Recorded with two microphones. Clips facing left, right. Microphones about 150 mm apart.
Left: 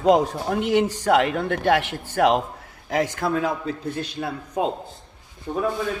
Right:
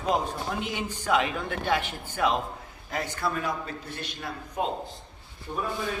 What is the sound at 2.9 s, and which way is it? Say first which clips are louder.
Speech: left 9 dB; 90° left.